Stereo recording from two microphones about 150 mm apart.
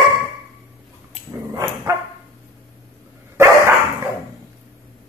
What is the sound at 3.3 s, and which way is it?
Dog, 15° right (ahead or behind).